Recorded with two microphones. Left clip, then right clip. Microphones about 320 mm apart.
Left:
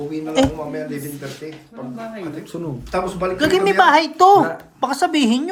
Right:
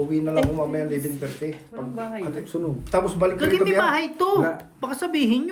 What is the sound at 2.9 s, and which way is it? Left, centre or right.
Speech, right.